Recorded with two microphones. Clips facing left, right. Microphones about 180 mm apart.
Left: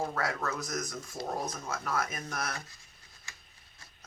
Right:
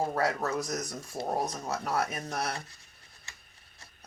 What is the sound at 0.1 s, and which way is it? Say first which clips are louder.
Speech: right 4 dB; 35° right (ahead or behind).